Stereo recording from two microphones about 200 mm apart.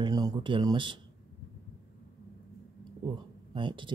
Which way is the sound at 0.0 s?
20° right (ahead or behind).